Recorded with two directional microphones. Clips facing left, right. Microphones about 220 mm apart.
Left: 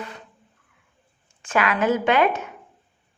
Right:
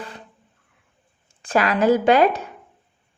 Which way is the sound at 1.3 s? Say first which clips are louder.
Right 2 dB; 35° right (ahead or behind).